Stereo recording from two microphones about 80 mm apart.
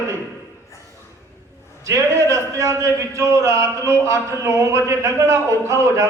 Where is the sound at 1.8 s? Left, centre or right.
Right.